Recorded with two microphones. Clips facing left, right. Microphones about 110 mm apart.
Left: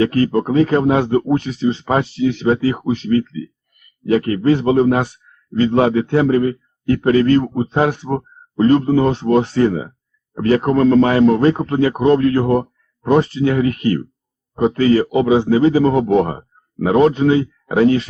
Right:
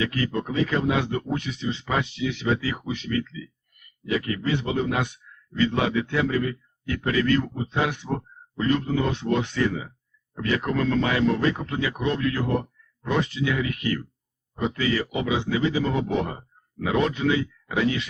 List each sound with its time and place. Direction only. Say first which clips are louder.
0.0 s speech: left 11 dB; 40° left (ahead or behind)